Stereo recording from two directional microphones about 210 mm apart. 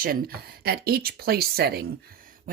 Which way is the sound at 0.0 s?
45° right (ahead or behind).